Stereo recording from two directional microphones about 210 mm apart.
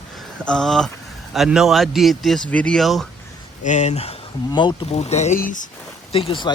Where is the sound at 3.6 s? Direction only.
35° left (ahead or behind).